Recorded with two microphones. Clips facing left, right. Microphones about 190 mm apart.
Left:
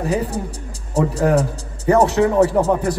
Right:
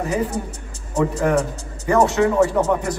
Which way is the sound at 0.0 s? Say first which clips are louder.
Left 1 dB; 35° left (ahead or behind).